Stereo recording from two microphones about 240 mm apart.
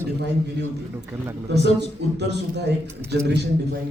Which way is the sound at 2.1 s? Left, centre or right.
Right.